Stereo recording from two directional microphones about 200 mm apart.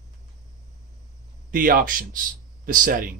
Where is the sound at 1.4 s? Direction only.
45° right (ahead or behind).